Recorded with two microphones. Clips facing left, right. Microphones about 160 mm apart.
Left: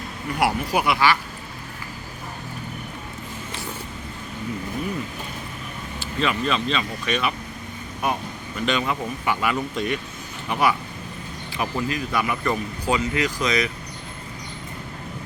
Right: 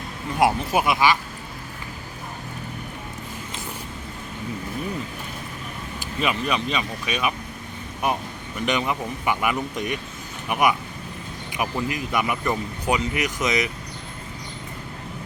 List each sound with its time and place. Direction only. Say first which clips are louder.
0.3 s speech: right 2 dB; 20° right (ahead or behind)
6.1 s speech: left 1 dB; 15° right (ahead or behind)
8.6 s speech: even; 20° right (ahead or behind)